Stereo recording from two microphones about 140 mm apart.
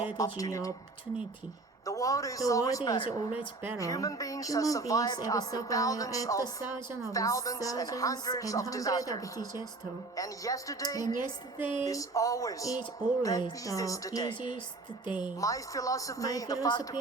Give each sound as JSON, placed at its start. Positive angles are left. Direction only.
{"t": 0.2, "sound": "speech", "side_deg": 25}
{"t": 1.8, "sound": "speech", "side_deg": 25}
{"t": 3.0, "sound": "music", "side_deg": 35}
{"t": 3.8, "sound": "speech", "side_deg": 25}
{"t": 11.2, "sound": "music", "side_deg": 35}
{"t": 11.9, "sound": "speech", "side_deg": 25}
{"t": 15.4, "sound": "speech", "side_deg": 25}